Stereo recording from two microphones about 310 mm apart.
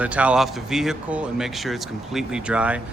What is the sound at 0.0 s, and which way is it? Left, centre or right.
Speech, centre.